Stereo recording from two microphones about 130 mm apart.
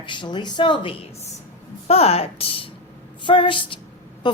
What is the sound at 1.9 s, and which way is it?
A woman's voice, 50° left (ahead or behind).